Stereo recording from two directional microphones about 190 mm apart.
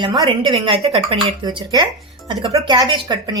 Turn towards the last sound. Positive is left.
turn(degrees=-20)  # may be behind; listen again after turning